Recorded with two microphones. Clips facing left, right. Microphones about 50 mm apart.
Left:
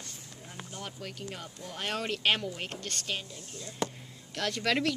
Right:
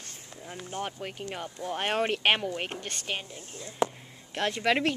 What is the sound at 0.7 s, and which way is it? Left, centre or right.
Speech, right.